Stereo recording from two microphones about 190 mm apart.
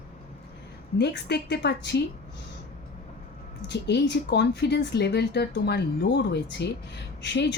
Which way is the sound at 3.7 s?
60° left (ahead or behind).